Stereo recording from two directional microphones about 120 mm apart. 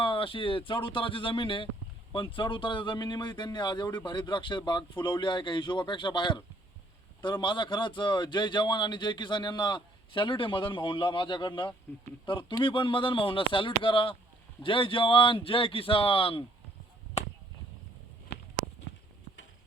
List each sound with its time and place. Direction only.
0.0 s a man's voice: 45° left (ahead or behind)
17.2 s speech: 65° left (ahead or behind)